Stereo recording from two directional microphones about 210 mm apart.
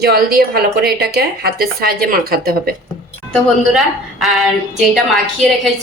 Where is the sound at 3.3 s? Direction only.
Centre (ahead or behind).